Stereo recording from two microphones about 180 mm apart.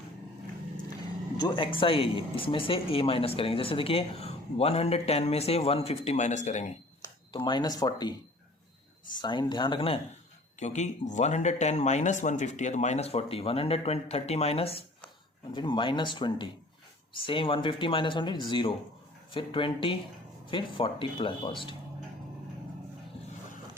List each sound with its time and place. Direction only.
1.4 s speech: 25° left (ahead or behind)
7.0 s speech: 25° left (ahead or behind)
9.1 s speech: 25° left (ahead or behind)
10.6 s speech: 40° left (ahead or behind)